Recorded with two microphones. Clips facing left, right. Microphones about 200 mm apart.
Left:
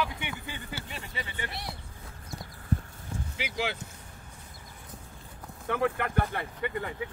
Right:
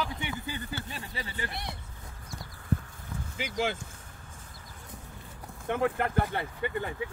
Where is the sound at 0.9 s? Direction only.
40° right (ahead or behind).